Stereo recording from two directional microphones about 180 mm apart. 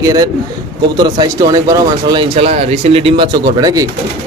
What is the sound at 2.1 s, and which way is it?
Speech, 35° right (ahead or behind).